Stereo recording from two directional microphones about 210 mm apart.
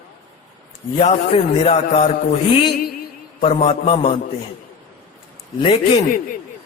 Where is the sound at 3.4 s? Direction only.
30° left (ahead or behind).